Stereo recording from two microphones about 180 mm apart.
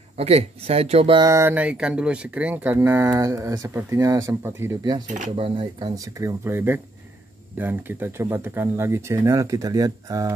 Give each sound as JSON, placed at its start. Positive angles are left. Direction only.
{"t": 0.2, "sound": "speech", "side_deg": -35}
{"t": 1.2, "sound": "speech", "side_deg": -15}
{"t": 5.0, "sound": "speech", "side_deg": -40}